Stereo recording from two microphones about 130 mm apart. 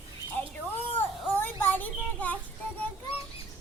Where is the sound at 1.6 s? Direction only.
15° left (ahead or behind).